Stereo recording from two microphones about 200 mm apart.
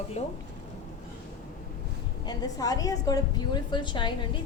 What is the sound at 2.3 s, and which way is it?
A woman's voice, 15° left (ahead or behind).